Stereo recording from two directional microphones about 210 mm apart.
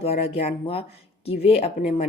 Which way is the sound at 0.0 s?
30° left (ahead or behind).